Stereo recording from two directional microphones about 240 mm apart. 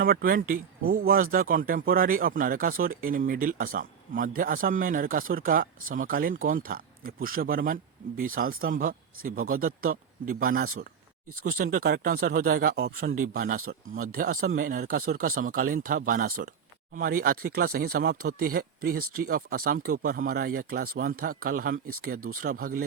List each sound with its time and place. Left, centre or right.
0.0 s speech: right